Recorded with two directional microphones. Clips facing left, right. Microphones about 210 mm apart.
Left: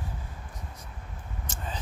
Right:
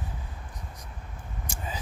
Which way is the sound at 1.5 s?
10° right (ahead or behind).